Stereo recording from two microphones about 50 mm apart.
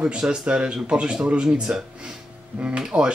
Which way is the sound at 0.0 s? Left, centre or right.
Centre.